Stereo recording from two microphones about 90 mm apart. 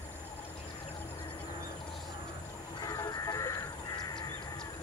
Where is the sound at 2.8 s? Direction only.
50° left (ahead or behind).